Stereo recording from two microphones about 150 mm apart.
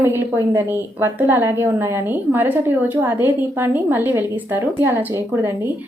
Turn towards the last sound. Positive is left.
turn(degrees=-15)  # may be behind; listen again after turning